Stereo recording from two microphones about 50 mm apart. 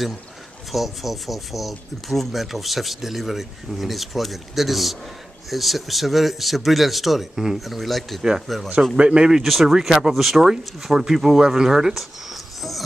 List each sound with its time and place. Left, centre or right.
0.7 s speech: centre
8.2 s speech: centre
9.4 s speech: centre